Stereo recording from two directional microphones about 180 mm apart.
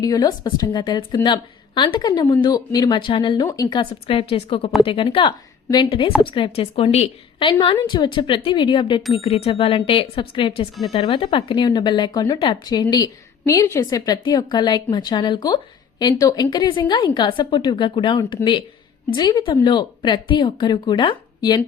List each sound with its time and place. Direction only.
0.0 s a woman's voice: 20° left (ahead or behind)